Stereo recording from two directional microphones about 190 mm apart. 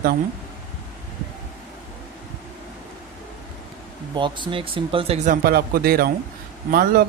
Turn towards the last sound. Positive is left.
turn(degrees=-50)  # may be behind; listen again after turning